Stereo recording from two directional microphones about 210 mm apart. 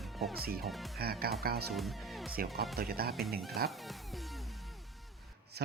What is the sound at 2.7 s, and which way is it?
Speech, 45° right (ahead or behind).